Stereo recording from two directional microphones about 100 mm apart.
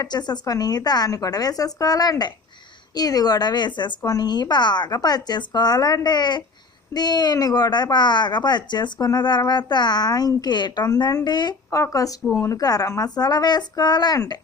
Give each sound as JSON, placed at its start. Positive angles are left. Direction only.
{"t": 0.0, "sound": "a woman's voice", "side_deg": 45}
{"t": 11.7, "sound": "a woman's voice", "side_deg": 35}